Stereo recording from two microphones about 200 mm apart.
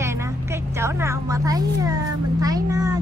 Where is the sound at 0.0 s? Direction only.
15° right (ahead or behind).